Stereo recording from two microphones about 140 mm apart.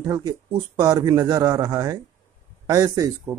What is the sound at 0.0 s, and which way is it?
Speech, 25° right (ahead or behind).